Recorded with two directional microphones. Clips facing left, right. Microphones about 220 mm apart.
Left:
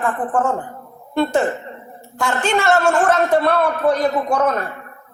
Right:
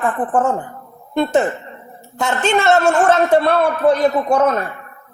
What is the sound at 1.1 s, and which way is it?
A man's voice, 20° right (ahead or behind).